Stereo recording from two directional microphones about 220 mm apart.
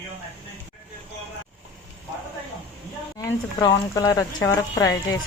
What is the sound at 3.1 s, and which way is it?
Speech, 20° left (ahead or behind).